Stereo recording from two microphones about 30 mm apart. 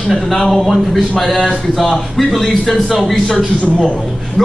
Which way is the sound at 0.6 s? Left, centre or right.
Centre.